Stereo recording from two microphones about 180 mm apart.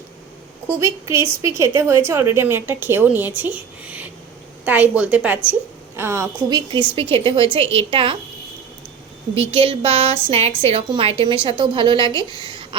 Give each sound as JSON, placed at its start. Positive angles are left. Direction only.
{"t": 0.7, "sound": "a woman's voice", "side_deg": -15}
{"t": 6.5, "sound": "a woman's voice", "side_deg": -25}
{"t": 9.3, "sound": "a woman's voice", "side_deg": -30}